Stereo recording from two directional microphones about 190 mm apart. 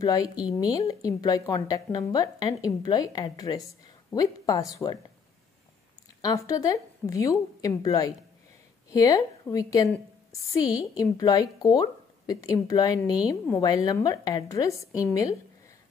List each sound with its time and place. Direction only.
0.0 s a woman's voice: 20° left (ahead or behind)
6.2 s a woman's voice: 15° left (ahead or behind)